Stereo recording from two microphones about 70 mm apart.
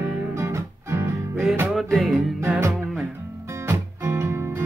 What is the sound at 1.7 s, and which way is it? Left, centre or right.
Music, centre.